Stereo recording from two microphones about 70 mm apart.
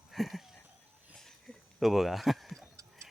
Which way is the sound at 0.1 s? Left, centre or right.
Centre.